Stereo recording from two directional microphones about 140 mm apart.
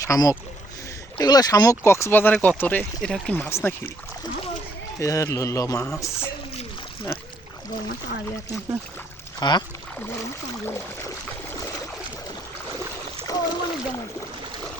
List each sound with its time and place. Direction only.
0.0 s speech: 25° left (ahead or behind)
4.9 s speech: 25° left (ahead or behind)
9.4 s speech: 30° left (ahead or behind)
13.2 s speech: 25° left (ahead or behind)